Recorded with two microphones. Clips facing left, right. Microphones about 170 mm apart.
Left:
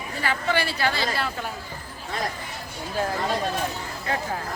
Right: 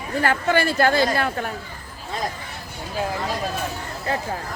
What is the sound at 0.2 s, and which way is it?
A woman's voice, 50° right (ahead or behind).